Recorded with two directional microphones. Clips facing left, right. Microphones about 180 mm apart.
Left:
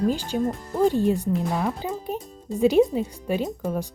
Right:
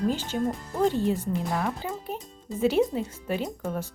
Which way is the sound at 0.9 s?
15° left (ahead or behind).